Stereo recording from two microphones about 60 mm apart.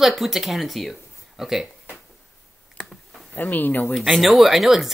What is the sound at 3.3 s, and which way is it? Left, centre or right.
Speech, left.